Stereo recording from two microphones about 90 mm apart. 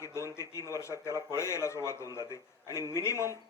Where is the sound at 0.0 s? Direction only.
35° left (ahead or behind).